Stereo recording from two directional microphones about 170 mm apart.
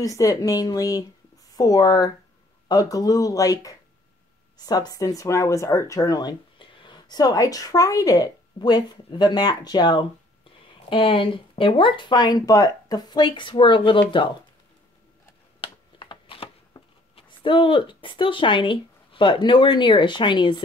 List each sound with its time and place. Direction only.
0.0 s speech: 20° left (ahead or behind)
15.6 s shuffling cards: 30° left (ahead or behind)